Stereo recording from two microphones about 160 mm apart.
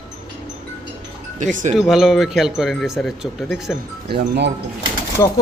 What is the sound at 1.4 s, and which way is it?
Speech, 50° right (ahead or behind).